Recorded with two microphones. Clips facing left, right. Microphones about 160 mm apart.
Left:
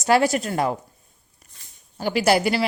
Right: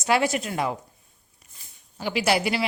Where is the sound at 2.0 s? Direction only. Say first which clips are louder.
Left 4 dB; 45° left (ahead or behind).